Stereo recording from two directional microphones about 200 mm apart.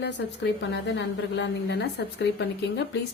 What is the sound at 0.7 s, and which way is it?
Speech, 60° left (ahead or behind).